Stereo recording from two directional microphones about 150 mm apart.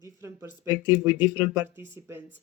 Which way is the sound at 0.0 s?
15° right (ahead or behind).